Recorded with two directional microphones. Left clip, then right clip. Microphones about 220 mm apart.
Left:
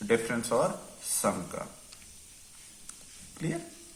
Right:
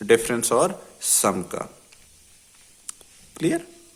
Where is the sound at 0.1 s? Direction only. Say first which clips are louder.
Right 9 dB; 50° right (ahead or behind).